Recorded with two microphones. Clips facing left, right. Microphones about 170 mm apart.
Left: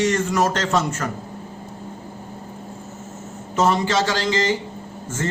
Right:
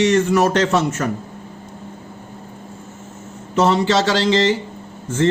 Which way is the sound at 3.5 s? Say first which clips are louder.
Right 3 dB; 70° right (ahead or behind).